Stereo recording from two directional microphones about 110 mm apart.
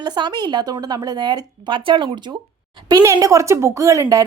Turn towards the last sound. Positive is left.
turn(degrees=-30)  # may be behind; listen again after turning